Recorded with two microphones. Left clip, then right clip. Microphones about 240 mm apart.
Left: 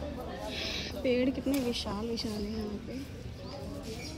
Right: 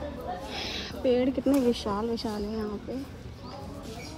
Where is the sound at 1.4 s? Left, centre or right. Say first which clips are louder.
Right 7 dB; right.